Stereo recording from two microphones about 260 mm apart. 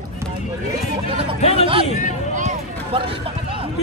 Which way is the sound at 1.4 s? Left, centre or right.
Left.